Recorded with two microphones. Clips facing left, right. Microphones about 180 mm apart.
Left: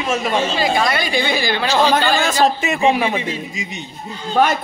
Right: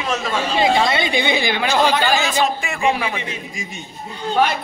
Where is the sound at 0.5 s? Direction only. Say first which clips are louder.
Right 1 dB; 25° right (ahead or behind).